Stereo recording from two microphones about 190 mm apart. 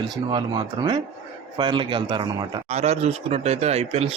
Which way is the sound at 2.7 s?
35° right (ahead or behind).